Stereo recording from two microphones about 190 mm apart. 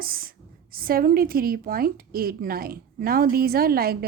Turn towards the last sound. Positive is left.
turn(degrees=-50)  # may be behind; listen again after turning